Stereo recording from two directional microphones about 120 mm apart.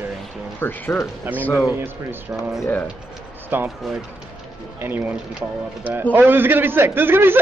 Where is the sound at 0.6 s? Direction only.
20° left (ahead or behind).